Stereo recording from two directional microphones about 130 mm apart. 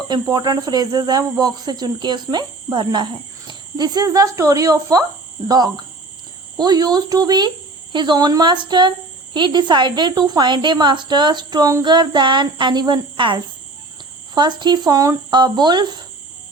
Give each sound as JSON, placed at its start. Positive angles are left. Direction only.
{"t": 0.1, "sound": "speech", "side_deg": -30}